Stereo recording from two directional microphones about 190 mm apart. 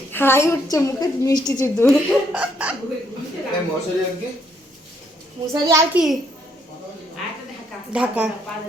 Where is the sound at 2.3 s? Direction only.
5° right (ahead or behind).